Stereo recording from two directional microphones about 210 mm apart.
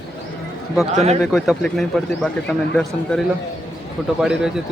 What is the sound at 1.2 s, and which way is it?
A man's voice, centre (ahead or behind).